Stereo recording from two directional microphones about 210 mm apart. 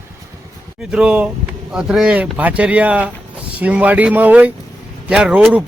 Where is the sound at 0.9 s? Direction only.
5° right (ahead or behind).